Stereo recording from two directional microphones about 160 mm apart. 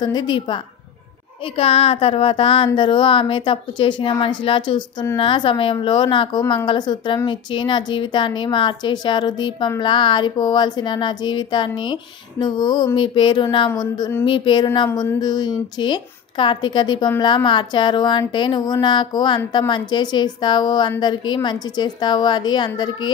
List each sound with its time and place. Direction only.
0.0 s speech: 25° left (ahead or behind)
1.6 s speech: 40° left (ahead or behind)